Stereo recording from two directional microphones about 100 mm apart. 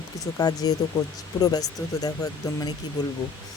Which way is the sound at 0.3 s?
40° left (ahead or behind).